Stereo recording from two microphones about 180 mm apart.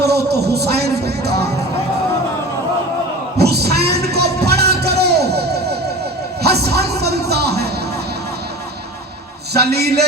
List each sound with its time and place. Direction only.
0.0 s speech: 65° right (ahead or behind)
3.3 s a sound: 65° right (ahead or behind)
9.5 s a man's voice: 65° right (ahead or behind)